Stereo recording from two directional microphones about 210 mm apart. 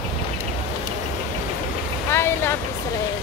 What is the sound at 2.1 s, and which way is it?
Vehicle, 10° left (ahead or behind).